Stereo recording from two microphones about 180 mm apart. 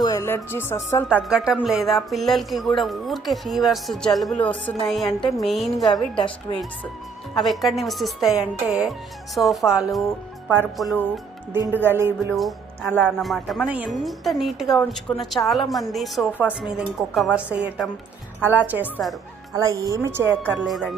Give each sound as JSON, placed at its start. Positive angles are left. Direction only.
{"t": 0.0, "sound": "speech", "side_deg": 20}
{"t": 1.0, "sound": "speech", "side_deg": -5}
{"t": 5.8, "sound": "a woman's voice", "side_deg": 25}
{"t": 7.3, "sound": "speech", "side_deg": 0}
{"t": 11.6, "sound": "speech", "side_deg": -10}
{"t": 12.3, "sound": "speech", "side_deg": 0}
{"t": 20.4, "sound": "speech", "side_deg": 5}